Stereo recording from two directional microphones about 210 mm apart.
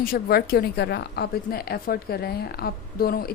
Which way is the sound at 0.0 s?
45° left (ahead or behind).